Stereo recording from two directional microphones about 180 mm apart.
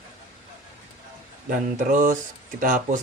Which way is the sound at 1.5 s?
45° right (ahead or behind).